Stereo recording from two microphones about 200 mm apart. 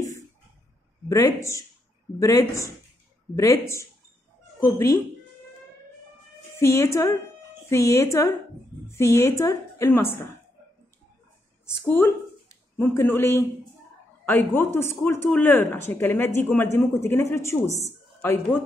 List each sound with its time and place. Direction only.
1.0 s speech: 15° left (ahead or behind)
6.6 s speech: 15° left (ahead or behind)
11.8 s speech: 10° left (ahead or behind)